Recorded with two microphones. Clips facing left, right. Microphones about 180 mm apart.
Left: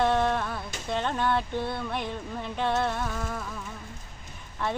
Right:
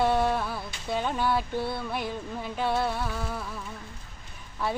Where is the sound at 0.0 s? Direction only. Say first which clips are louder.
Even; 10° right (ahead or behind).